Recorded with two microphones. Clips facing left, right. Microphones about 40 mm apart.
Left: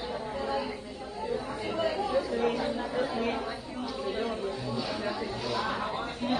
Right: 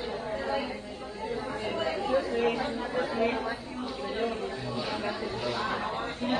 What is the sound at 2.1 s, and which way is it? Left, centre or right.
Chatter, right.